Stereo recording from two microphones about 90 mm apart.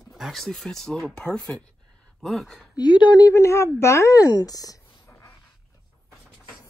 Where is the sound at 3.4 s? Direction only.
30° left (ahead or behind).